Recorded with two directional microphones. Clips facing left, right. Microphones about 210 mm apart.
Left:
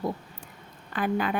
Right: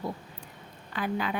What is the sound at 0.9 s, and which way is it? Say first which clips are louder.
Speech: left 4 dB; 50° left (ahead or behind).